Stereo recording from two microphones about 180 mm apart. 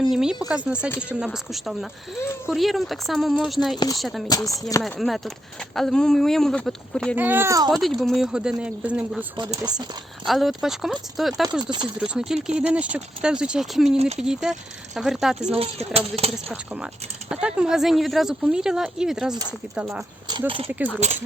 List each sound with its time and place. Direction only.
0.1 s speech: 5° right (ahead or behind)
7.2 s speech: 10° right (ahead or behind)
7.7 s speech: centre (ahead or behind)
10.2 s speech: centre (ahead or behind)
11.6 s speech: 25° right (ahead or behind)
11.9 s speech: 5° right (ahead or behind)
13.9 s a sound: 35° right (ahead or behind)
14.2 s speech: 5° right (ahead or behind)
15.5 s a sound: 35° right (ahead or behind)
16.5 s speech: 5° right (ahead or behind)
21.0 s a sound: 40° right (ahead or behind)